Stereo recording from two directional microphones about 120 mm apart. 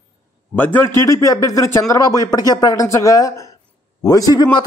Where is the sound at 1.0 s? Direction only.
30° left (ahead or behind).